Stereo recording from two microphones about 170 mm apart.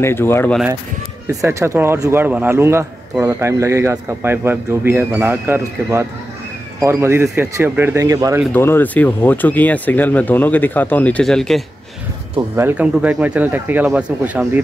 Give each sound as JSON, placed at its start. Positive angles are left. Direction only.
{"t": 0.0, "sound": "speech", "side_deg": 15}
{"t": 1.3, "sound": "a man's voice", "side_deg": -20}
{"t": 8.5, "sound": "speech", "side_deg": 15}
{"t": 12.4, "sound": "a man's voice", "side_deg": -15}